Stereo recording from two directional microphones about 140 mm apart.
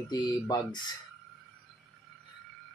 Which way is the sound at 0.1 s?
30° left (ahead or behind).